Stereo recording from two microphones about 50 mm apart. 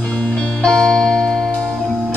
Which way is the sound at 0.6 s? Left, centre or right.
Centre.